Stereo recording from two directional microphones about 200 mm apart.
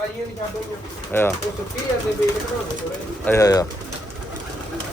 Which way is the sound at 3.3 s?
15° left (ahead or behind).